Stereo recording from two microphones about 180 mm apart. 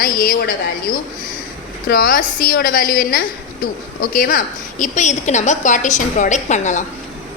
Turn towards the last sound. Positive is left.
turn(degrees=40)  # may be behind; listen again after turning